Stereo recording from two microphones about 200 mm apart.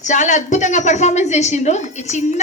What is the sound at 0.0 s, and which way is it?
A woman's voice, 35° left (ahead or behind).